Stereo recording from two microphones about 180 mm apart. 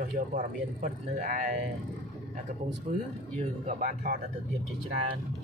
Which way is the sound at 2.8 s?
40° right (ahead or behind).